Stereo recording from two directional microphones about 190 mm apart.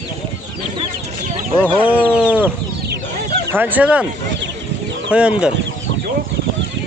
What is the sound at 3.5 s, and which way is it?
Speech, 10° right (ahead or behind).